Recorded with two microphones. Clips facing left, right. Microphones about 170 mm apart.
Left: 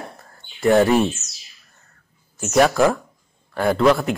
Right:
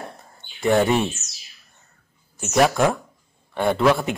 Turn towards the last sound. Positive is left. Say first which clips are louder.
# left 2 dB
turn(degrees=0)  # may be behind; listen again after turning